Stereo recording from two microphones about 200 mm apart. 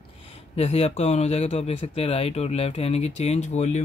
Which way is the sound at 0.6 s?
30° left (ahead or behind).